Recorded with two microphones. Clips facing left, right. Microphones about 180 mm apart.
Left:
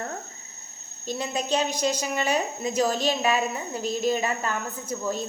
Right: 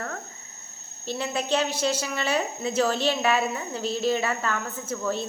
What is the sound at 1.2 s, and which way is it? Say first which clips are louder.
A woman's voice: even; 15° left (ahead or behind).